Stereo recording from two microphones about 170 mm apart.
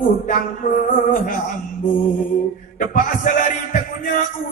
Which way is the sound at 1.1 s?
50° left (ahead or behind).